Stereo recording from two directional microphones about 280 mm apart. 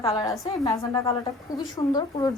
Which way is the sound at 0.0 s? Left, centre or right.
Centre.